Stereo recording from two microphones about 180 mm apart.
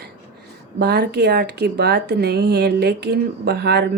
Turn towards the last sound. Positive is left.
turn(degrees=-65)  # may be behind; listen again after turning